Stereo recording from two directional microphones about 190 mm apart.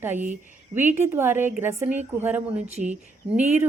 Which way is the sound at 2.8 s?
35° right (ahead or behind).